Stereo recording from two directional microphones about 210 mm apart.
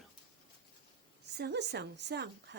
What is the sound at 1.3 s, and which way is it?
Speech, 55° right (ahead or behind).